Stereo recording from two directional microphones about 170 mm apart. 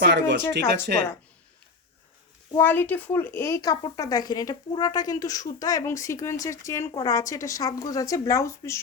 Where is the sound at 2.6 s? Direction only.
10° left (ahead or behind).